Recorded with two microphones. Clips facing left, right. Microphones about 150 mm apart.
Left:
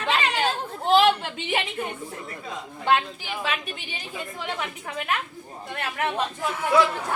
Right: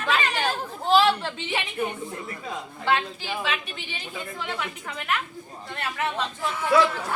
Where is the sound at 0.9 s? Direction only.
20° left (ahead or behind).